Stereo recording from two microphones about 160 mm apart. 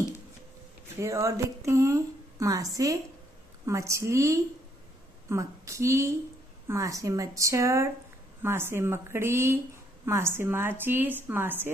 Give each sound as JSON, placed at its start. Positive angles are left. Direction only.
{"t": 0.9, "sound": "a woman's voice", "side_deg": -20}